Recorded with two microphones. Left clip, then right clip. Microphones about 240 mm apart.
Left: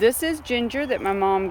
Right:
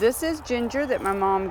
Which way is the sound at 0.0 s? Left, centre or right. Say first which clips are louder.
Left 2 dB; centre.